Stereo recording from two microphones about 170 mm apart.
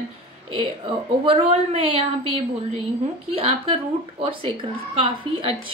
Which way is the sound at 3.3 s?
35° right (ahead or behind).